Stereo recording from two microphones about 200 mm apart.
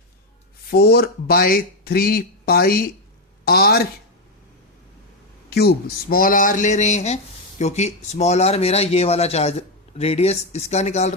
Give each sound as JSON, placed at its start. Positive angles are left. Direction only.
{"t": 0.7, "sound": "speech", "side_deg": 55}
{"t": 5.5, "sound": "speech", "side_deg": 55}